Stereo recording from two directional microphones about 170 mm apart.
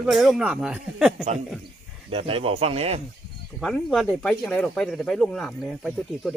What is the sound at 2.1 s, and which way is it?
Speech, 35° right (ahead or behind).